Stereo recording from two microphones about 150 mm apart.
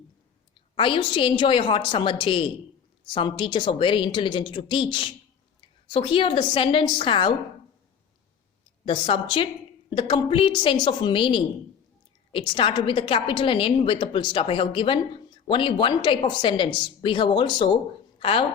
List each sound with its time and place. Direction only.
0.8 s a woman's voice: 35° left (ahead or behind)
8.8 s a woman's voice: 35° left (ahead or behind)